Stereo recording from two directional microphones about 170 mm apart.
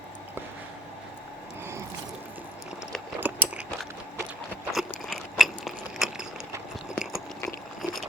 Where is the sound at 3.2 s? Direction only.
10° right (ahead or behind).